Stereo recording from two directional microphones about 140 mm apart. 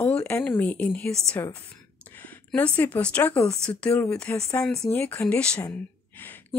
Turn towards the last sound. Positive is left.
turn(degrees=15)  # may be behind; listen again after turning